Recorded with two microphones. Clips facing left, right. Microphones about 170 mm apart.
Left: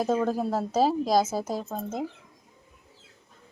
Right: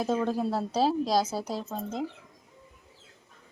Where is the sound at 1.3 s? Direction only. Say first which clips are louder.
Left 3 dB; 45° left (ahead or behind).